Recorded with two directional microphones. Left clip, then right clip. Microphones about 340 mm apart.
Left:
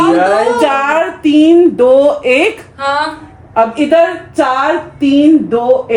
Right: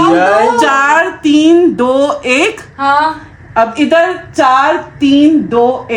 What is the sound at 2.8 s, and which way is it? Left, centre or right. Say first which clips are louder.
Speech: right 4 dB; right.